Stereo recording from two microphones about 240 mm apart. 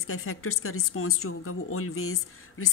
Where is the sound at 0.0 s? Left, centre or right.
Left.